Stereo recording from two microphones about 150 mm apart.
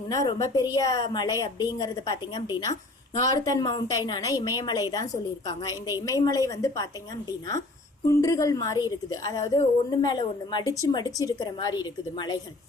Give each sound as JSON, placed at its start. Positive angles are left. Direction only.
{"t": 0.1, "sound": "a woman's voice", "side_deg": 25}
{"t": 6.1, "sound": "a woman's voice", "side_deg": 25}